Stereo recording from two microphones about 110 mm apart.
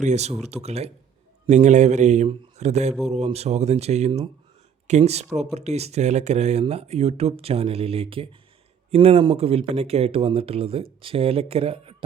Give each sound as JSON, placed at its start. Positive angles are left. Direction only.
{"t": 0.0, "sound": "speech", "side_deg": -90}
{"t": 1.5, "sound": "speech", "side_deg": -90}
{"t": 8.9, "sound": "speech", "side_deg": -65}